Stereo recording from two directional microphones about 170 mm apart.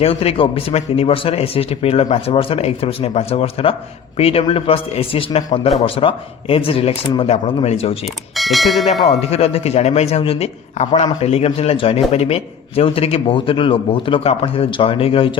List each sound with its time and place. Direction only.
0.0 s speech: 35° left (ahead or behind)
8.0 s speech: centre (ahead or behind)
9.0 s speech: 35° left (ahead or behind)